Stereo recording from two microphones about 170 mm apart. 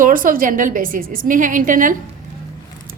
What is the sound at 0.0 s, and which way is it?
A woman's voice, 55° right (ahead or behind).